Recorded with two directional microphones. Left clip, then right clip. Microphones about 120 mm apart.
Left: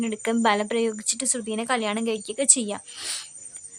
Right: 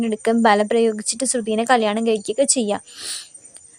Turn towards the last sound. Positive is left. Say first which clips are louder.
# right 2 dB
turn(degrees=-25)  # may be behind; listen again after turning